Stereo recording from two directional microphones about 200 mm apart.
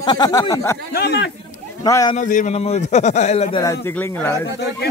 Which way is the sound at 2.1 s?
40° left (ahead or behind).